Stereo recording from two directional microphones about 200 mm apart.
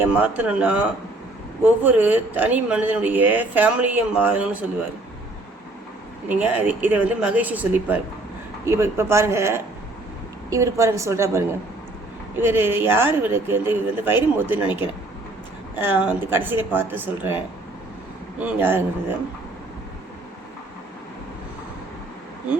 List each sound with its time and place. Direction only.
0.0 s speech: 10° right (ahead or behind)
6.2 s speech: 10° right (ahead or behind)
15.8 s speech: 10° right (ahead or behind)